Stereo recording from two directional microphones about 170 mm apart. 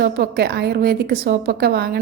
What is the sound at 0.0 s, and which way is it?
A woman's voice, 70° right (ahead or behind).